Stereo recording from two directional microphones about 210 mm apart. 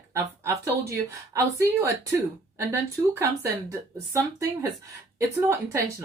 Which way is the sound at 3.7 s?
15° right (ahead or behind).